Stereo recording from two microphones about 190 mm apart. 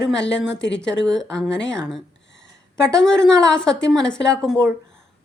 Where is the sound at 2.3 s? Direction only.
70° left (ahead or behind).